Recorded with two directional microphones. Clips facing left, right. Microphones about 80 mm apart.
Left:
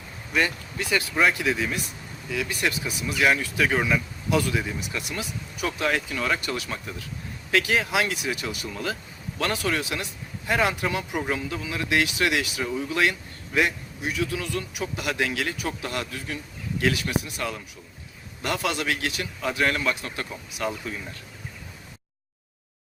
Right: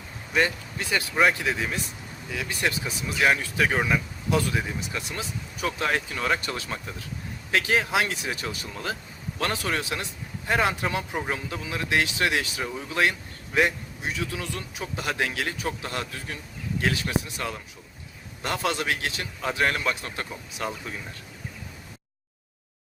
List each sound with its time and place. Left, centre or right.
0.3 s a man's voice: right